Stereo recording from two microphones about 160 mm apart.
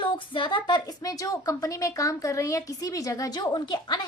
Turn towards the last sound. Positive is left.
turn(degrees=25)  # may be behind; listen again after turning